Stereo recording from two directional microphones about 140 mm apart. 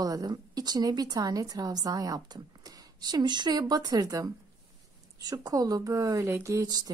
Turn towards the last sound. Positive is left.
turn(degrees=-30)  # may be behind; listen again after turning